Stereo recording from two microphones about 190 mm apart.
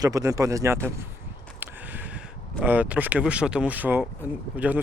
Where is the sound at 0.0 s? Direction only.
15° right (ahead or behind).